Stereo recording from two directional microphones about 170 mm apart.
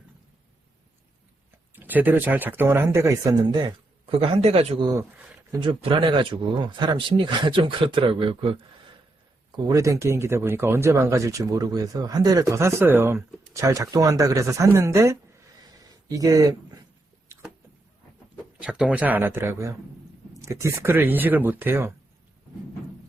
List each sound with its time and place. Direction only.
1.7 s speech: 10° right (ahead or behind)
4.0 s a man's voice: 35° right (ahead or behind)
4.8 s speech: 20° right (ahead or behind)
9.6 s speech: 20° right (ahead or behind)
15.8 s a sound: 20° right (ahead or behind)
18.6 s speech: 5° right (ahead or behind)